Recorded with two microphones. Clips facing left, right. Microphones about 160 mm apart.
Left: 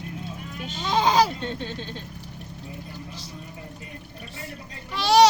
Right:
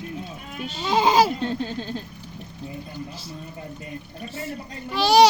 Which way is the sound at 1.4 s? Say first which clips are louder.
Right 5 dB; 40° right (ahead or behind).